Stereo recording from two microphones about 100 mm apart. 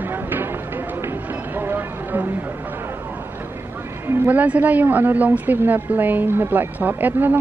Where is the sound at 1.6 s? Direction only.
20° right (ahead or behind).